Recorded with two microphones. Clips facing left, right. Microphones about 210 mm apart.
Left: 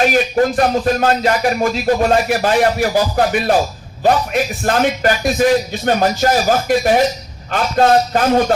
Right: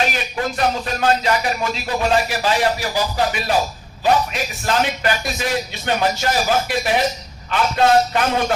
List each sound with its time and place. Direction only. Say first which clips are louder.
0.1 s speech: left 10 dB; 45° left (ahead or behind)